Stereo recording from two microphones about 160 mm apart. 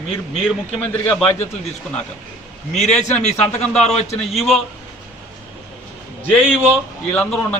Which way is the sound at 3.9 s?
45° left (ahead or behind).